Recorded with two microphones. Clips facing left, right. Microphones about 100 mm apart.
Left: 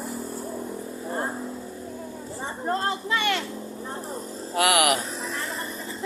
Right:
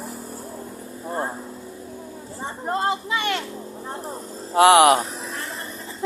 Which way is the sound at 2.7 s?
15° right (ahead or behind).